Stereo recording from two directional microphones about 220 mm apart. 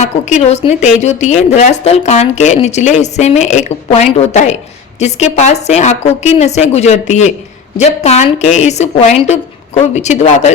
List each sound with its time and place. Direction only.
0.0 s speech: 30° left (ahead or behind)